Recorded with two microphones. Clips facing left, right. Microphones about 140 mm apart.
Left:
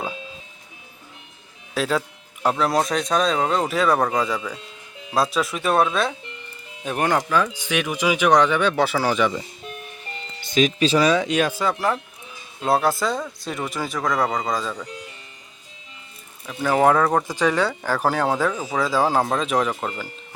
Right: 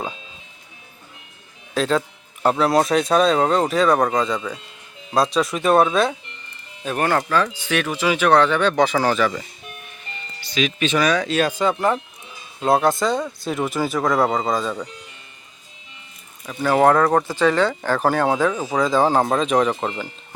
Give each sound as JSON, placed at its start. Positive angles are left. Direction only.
{"t": 1.7, "sound": "speech", "side_deg": 5}
{"t": 6.8, "sound": "speech", "side_deg": 15}
{"t": 10.4, "sound": "music", "side_deg": 50}
{"t": 10.8, "sound": "speech", "side_deg": 30}
{"t": 11.3, "sound": "speech", "side_deg": 10}
{"t": 16.5, "sound": "speech", "side_deg": 0}
{"t": 17.2, "sound": "speech", "side_deg": 15}